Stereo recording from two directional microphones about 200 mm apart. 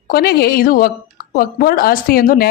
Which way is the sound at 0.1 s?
50° left (ahead or behind).